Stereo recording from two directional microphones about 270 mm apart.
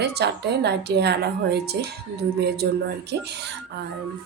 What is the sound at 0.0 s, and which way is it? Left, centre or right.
Speech, right.